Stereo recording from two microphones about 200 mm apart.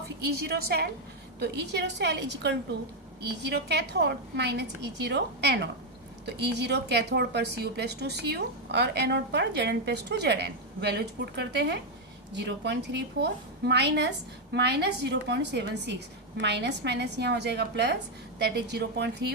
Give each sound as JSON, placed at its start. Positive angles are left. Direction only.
{"t": 0.3, "sound": "a woman's voice", "side_deg": -50}